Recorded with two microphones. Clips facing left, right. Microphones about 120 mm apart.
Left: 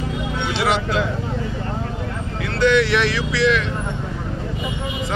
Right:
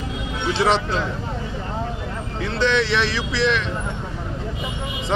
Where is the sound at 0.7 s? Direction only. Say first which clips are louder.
Left 1 dB; 30° right (ahead or behind).